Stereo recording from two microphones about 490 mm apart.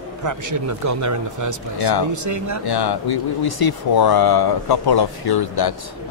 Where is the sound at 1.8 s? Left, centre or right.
Left.